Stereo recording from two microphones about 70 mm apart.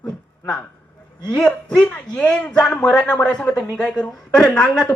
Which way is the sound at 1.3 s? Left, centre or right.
Centre.